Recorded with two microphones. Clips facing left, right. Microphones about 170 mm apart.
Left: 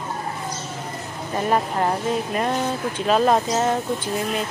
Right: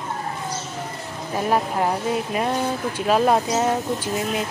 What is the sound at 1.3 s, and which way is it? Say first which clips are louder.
Speech: even; 5° right (ahead or behind).